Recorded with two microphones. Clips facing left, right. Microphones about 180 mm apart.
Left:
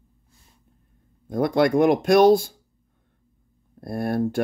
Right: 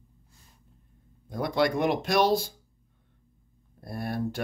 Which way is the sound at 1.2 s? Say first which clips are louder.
Left 6 dB; 50° left (ahead or behind).